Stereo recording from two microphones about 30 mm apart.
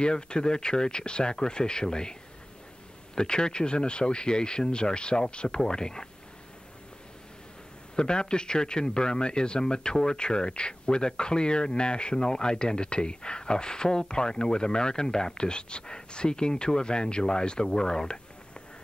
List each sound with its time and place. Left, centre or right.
0.0 s speech: left
3.2 s speech: left
7.9 s speech: left
17.6 s a sound: left